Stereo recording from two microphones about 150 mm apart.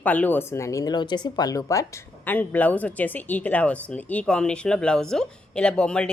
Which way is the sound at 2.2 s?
10° left (ahead or behind).